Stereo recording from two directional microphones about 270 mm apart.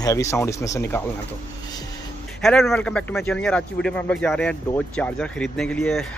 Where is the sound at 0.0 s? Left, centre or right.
Centre.